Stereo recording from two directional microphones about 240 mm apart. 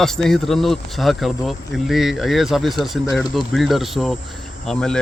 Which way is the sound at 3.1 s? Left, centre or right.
Centre.